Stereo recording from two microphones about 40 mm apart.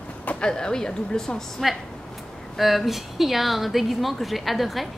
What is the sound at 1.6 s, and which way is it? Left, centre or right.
A woman's voice, centre.